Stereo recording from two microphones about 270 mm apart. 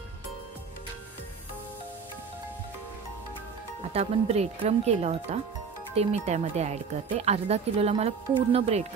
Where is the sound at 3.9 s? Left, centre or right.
Right.